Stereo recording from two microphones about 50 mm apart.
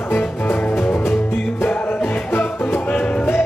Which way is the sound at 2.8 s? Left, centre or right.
Left.